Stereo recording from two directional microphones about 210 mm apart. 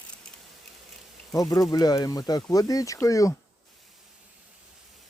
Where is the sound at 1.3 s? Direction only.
15° left (ahead or behind).